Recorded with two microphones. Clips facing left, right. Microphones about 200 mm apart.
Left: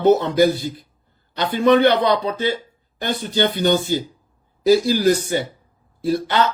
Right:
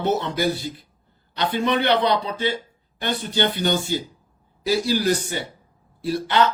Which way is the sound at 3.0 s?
45° left (ahead or behind).